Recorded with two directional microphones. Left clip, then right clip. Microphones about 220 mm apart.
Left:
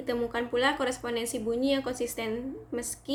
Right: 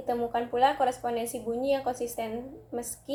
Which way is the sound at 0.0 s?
60° left (ahead or behind).